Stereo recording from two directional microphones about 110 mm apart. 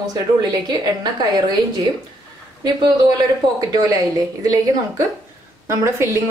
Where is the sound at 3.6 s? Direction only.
35° right (ahead or behind).